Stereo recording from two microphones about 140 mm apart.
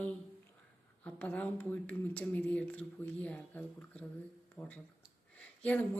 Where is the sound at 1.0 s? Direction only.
10° left (ahead or behind).